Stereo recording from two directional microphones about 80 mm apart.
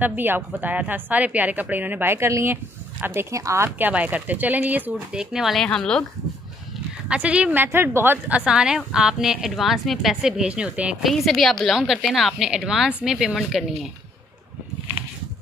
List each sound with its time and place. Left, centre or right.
0.0 s a woman's voice: right
5.1 s a woman's voice: centre
7.1 s a woman's voice: centre
7.6 s a woman's voice: right; by 11.1 s centre
11.1 s a woman's voice: centre